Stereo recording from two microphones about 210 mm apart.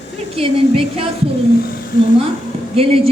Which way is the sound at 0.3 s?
30° right (ahead or behind).